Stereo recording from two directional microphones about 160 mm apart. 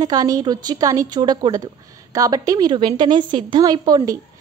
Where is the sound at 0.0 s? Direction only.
25° right (ahead or behind).